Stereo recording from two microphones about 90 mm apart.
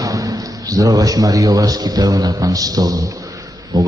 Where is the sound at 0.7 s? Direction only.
40° right (ahead or behind).